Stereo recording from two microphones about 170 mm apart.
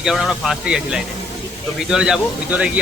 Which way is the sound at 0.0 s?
Centre (ahead or behind).